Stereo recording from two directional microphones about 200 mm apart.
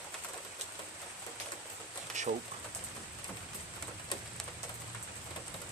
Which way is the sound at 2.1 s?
35° right (ahead or behind).